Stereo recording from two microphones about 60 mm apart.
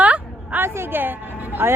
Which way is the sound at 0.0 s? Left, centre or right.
Right.